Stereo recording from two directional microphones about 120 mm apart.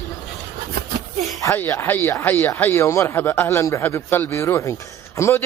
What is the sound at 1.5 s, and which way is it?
A man's voice, 20° left (ahead or behind).